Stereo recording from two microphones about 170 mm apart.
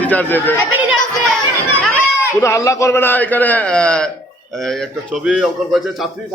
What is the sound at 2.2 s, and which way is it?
A man's voice, 15° left (ahead or behind).